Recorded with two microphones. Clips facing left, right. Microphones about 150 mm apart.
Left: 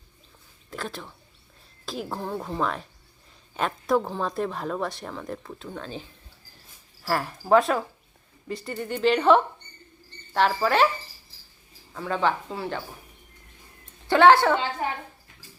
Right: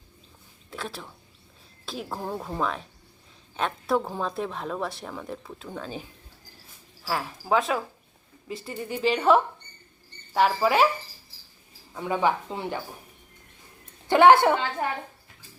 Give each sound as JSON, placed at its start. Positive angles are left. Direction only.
{"t": 0.7, "sound": "speech", "side_deg": 0}
{"t": 11.9, "sound": "speech", "side_deg": -15}
{"t": 14.1, "sound": "speech", "side_deg": -15}